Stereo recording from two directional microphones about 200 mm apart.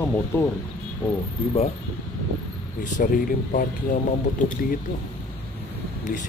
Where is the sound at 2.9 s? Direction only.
40° left (ahead or behind).